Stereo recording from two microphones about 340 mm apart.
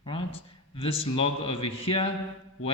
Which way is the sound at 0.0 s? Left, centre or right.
Centre.